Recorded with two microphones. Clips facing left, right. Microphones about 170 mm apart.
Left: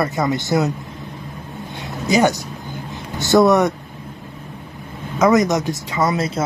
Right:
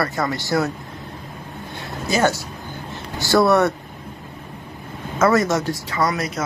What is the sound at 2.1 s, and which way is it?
A man's voice, 15° left (ahead or behind).